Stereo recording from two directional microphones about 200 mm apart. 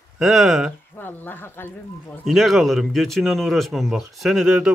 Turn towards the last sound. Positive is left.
turn(degrees=-5)  # may be behind; listen again after turning